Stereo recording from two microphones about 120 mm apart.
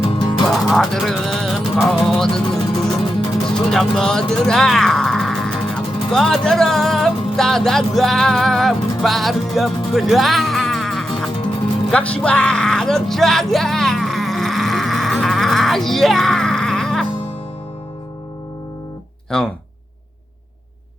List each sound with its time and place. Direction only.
0.0 s music: 35° left (ahead or behind)
0.4 s music: centre (ahead or behind)
3.4 s speech: 5° left (ahead or behind)
11.9 s music: 10° left (ahead or behind)
19.3 s speech: 5° left (ahead or behind)